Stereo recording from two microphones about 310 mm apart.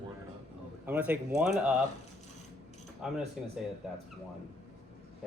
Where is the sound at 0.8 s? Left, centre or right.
Centre.